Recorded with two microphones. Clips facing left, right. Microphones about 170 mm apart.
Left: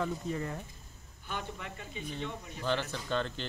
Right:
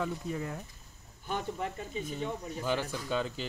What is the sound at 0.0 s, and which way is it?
Speech, 5° right (ahead or behind).